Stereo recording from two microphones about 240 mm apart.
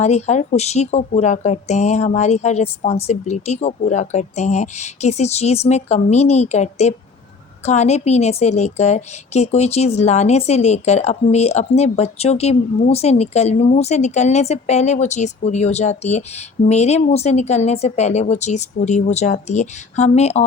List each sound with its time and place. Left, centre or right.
0.0 s a woman's voice: left